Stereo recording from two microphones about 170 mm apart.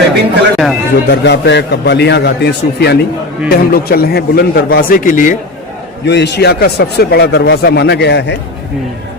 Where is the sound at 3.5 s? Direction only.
60° left (ahead or behind).